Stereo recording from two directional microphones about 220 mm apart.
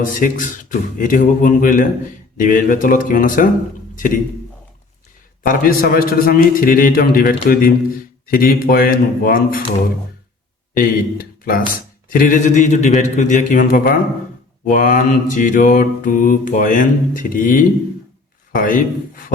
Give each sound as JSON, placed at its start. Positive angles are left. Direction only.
{"t": 0.0, "sound": "mantra", "side_deg": 35}
{"t": 3.9, "sound": "a man's voice", "side_deg": 40}
{"t": 5.4, "sound": "mantra", "side_deg": 40}
{"t": 10.8, "sound": "speech", "side_deg": 40}
{"t": 12.0, "sound": "mantra", "side_deg": 40}